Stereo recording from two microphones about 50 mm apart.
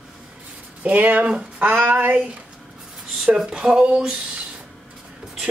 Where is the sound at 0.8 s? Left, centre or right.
Right.